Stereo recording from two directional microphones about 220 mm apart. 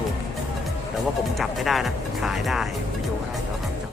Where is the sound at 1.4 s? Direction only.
Centre (ahead or behind).